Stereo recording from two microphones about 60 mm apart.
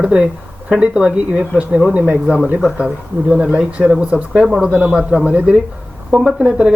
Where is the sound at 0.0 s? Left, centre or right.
Centre.